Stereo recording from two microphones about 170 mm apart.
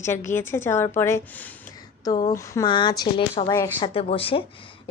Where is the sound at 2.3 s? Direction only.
20° left (ahead or behind).